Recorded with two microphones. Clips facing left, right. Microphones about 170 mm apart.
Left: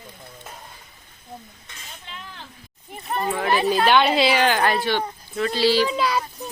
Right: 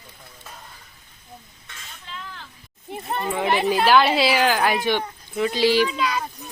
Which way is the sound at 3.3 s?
15° right (ahead or behind).